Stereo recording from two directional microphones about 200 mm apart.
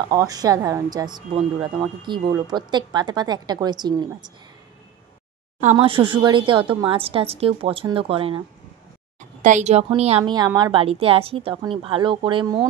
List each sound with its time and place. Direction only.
0.1 s speech: 20° right (ahead or behind)
5.6 s speech: 30° right (ahead or behind)
9.4 s a woman's voice: 35° right (ahead or behind)
10.3 s speech: 20° right (ahead or behind)